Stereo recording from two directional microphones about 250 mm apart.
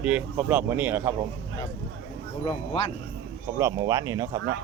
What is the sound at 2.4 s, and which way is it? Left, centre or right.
Speech, left.